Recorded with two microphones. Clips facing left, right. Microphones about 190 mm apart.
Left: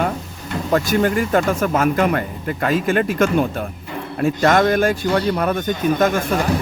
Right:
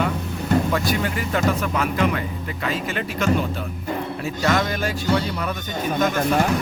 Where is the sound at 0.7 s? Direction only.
45° left (ahead or behind).